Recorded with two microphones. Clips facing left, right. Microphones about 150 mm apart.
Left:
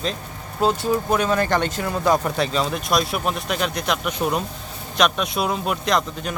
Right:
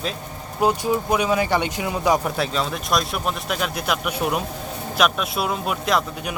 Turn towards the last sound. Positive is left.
turn(degrees=-5)  # may be behind; listen again after turning